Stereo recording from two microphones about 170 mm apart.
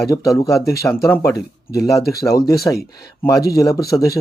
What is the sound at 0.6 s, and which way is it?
Speech, 20° left (ahead or behind).